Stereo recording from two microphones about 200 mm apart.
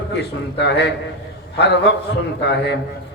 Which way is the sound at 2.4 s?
55° left (ahead or behind).